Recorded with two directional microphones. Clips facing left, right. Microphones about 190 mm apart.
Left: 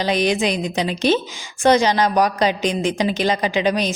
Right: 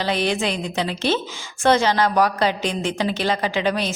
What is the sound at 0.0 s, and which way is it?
A woman's voice, 15° left (ahead or behind).